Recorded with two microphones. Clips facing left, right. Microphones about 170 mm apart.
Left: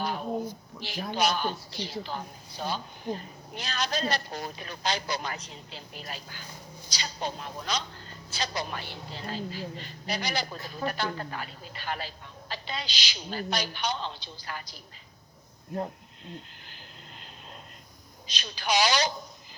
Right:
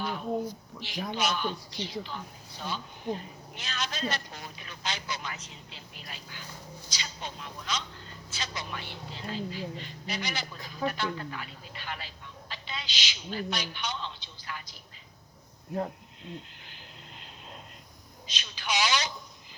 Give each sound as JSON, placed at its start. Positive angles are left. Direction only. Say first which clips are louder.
{"t": 0.0, "sound": "a sound", "louder": "left 2 dB", "side_deg": 40}
{"t": 1.1, "sound": "a woman's voice", "louder": "left 4 dB", "side_deg": 35}
{"t": 18.3, "sound": "a woman's voice", "louder": "left 5 dB", "side_deg": 35}